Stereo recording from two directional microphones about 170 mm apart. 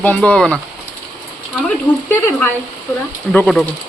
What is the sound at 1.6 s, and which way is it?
Speech, 10° left (ahead or behind).